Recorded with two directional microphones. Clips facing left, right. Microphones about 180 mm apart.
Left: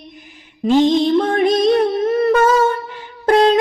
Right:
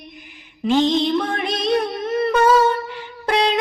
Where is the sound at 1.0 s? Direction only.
50° left (ahead or behind).